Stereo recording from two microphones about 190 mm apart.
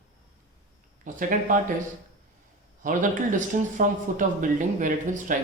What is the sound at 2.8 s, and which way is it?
Speech, 45° right (ahead or behind).